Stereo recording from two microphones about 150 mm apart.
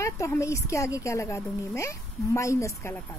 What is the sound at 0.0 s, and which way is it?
Speech, 20° left (ahead or behind).